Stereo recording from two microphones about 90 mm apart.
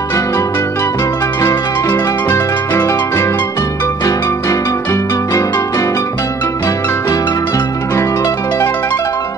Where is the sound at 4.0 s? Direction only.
40° left (ahead or behind).